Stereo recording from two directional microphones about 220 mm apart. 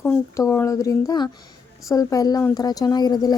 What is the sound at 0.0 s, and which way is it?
Speech, 10° left (ahead or behind).